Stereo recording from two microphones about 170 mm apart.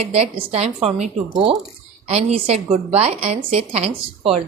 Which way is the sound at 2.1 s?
40° right (ahead or behind).